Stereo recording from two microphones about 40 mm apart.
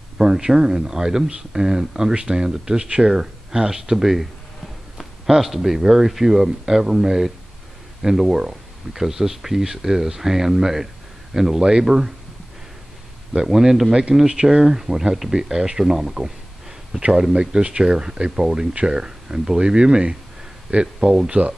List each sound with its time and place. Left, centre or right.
0.2 s speech: centre
5.3 s speech: centre
13.3 s speech: centre
14.2 s speech: right
14.6 s speech: centre
16.9 s speech: centre
17.3 s speech: right